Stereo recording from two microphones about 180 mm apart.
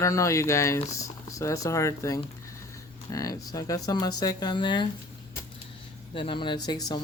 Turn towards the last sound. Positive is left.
turn(degrees=20)  # may be behind; listen again after turning